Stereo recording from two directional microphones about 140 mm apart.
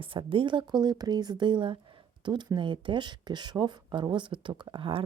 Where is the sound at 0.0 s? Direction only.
40° right (ahead or behind).